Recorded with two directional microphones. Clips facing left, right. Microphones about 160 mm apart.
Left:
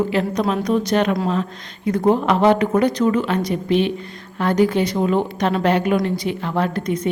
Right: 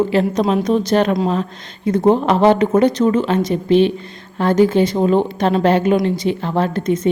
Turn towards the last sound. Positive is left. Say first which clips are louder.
# right 4 dB
turn(degrees=-25)  # may be behind; listen again after turning